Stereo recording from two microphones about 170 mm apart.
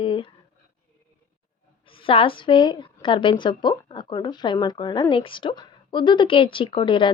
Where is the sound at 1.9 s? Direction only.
30° left (ahead or behind).